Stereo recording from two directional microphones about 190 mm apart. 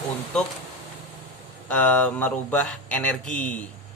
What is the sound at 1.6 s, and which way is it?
Speech, 10° left (ahead or behind).